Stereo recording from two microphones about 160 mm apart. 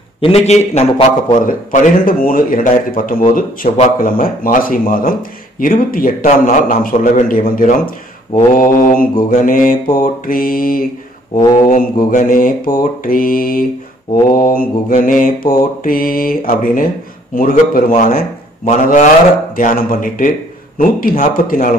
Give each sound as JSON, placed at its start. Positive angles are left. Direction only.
{"t": 0.2, "sound": "a man's voice", "side_deg": 40}
{"t": 19.5, "sound": "a man's voice", "side_deg": 60}